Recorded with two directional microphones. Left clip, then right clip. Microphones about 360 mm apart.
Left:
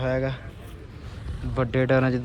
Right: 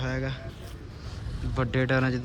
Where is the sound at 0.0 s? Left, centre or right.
Centre.